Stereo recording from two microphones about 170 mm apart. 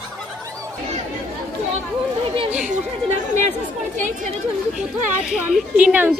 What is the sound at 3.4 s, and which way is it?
Chatter, 50° right (ahead or behind).